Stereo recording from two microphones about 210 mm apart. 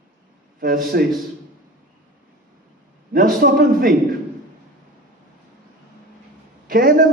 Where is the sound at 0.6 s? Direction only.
45° right (ahead or behind).